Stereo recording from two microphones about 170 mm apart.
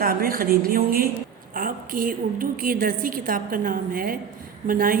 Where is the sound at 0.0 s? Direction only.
60° right (ahead or behind).